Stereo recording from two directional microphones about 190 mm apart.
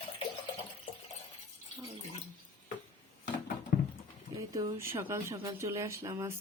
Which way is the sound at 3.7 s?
45° left (ahead or behind).